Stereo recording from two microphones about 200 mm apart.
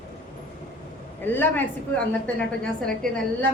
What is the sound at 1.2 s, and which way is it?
A woman's voice, 10° left (ahead or behind).